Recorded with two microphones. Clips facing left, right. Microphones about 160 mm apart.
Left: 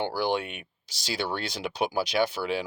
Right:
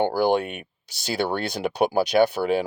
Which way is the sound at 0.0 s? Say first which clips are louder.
Right 7 dB; 50° right (ahead or behind).